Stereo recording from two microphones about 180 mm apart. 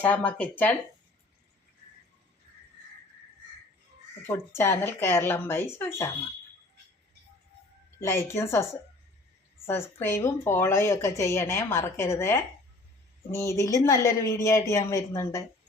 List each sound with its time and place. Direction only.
0.0 s a woman's voice: 10° left (ahead or behind)
4.2 s a woman's voice: 15° left (ahead or behind)
8.0 s a woman's voice: 15° left (ahead or behind)